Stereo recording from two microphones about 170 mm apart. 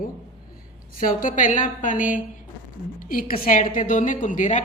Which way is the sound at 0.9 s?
50° left (ahead or behind).